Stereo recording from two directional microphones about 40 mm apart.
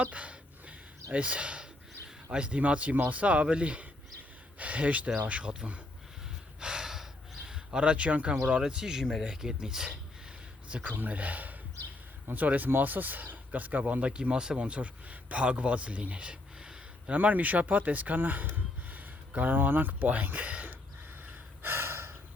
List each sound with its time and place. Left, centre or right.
0.0 s a sound: right
2.0 s speech: right
6.6 s gasp: centre
7.4 s speech: right
10.8 s speech: right
14.0 s speech: right
17.1 s speech: right
18.5 s a sound: right
20.0 s speech: right
21.6 s gasp: right